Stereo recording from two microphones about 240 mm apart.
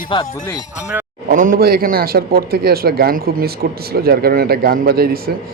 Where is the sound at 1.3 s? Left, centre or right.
Right.